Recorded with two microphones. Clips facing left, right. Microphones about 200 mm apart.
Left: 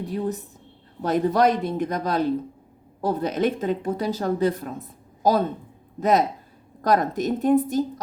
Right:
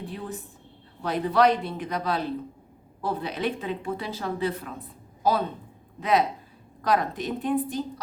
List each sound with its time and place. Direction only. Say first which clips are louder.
0.0 s a woman's voice: left 8 dB; 40° left (ahead or behind)